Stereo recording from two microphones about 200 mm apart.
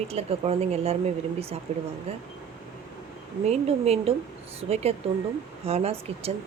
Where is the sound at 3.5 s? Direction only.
30° right (ahead or behind).